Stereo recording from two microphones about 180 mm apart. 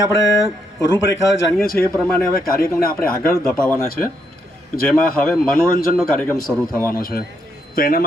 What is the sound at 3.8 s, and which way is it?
Speech, 55° left (ahead or behind).